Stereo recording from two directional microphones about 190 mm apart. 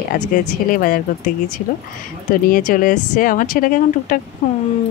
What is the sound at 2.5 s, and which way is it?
Speech, 45° left (ahead or behind).